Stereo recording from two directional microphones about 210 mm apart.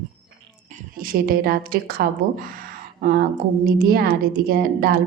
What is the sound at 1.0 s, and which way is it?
Speech, 45° right (ahead or behind).